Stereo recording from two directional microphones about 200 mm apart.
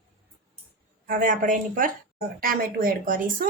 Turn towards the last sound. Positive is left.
turn(degrees=-45)  # may be behind; listen again after turning